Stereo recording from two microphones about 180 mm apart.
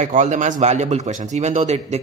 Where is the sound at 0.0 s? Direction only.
45° right (ahead or behind).